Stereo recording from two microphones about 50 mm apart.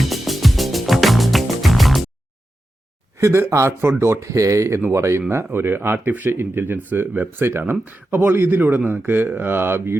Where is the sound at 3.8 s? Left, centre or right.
Right.